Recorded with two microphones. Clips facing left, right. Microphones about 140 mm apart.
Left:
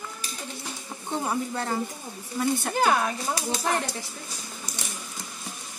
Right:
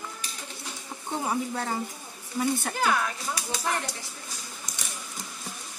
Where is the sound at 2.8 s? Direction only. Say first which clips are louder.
Left 3 dB; 35° left (ahead or behind).